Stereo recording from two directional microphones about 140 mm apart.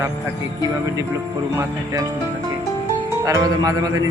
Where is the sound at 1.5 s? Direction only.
20° right (ahead or behind).